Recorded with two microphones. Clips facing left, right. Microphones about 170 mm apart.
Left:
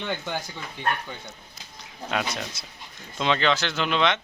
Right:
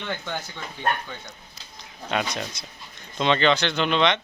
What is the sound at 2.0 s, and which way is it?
A man's voice, 5° left (ahead or behind).